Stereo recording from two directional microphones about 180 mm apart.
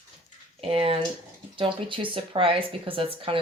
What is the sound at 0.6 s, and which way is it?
Speech, 30° right (ahead or behind).